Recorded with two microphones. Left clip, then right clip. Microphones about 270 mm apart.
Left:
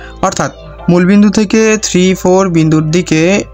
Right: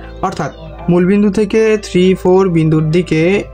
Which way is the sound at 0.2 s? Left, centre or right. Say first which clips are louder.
Left 5 dB; left.